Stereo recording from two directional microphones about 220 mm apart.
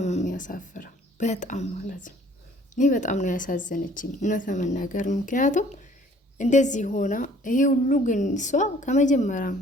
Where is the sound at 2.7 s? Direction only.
35° left (ahead or behind).